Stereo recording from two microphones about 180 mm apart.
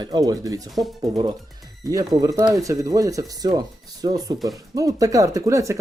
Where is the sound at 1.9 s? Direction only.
20° right (ahead or behind).